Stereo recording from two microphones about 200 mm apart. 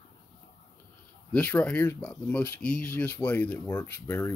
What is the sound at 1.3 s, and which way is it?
Speech, 5° left (ahead or behind).